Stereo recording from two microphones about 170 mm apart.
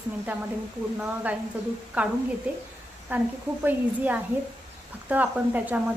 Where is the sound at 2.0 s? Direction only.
10° right (ahead or behind).